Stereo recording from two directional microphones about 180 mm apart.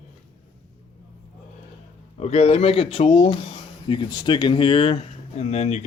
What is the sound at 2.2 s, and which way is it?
Speech, 35° left (ahead or behind).